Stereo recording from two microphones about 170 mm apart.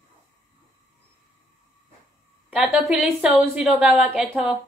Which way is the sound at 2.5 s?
5° right (ahead or behind).